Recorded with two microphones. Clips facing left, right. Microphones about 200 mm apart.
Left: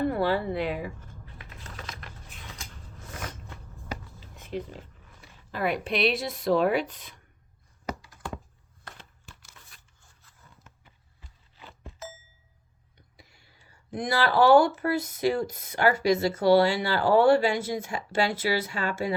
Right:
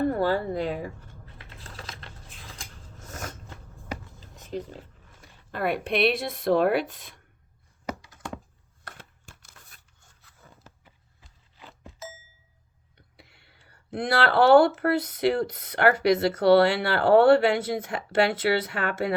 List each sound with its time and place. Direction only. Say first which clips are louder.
0.0 s typing: right 1 dB; 45° right (ahead or behind)
2.6 s biting: even; 45° right (ahead or behind)
4.4 s speech: right 1 dB; 40° right (ahead or behind)
8.0 s thunk: even; 20° right (ahead or behind)
9.0 s a sound: right 1 dB; 55° right (ahead or behind)
13.0 s a sound: right 1 dB; 60° right (ahead or behind)
14.8 s speech: right 3 dB; 60° right (ahead or behind)